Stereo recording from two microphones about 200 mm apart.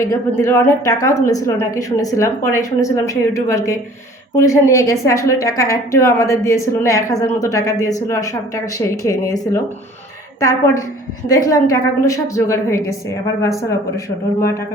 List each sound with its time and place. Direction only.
0.0 s a woman's voice: 15° left (ahead or behind)
11.3 s a woman's voice: 15° left (ahead or behind)